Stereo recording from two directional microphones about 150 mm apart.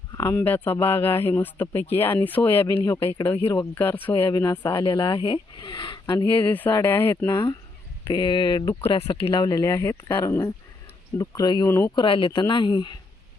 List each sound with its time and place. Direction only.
0.2 s speech: 15° left (ahead or behind)
4.8 s speech: 30° left (ahead or behind)
6.3 s speech: 10° left (ahead or behind)
8.0 s speech: 30° left (ahead or behind)
9.4 s speech: 20° left (ahead or behind)
11.9 s speech: 35° left (ahead or behind)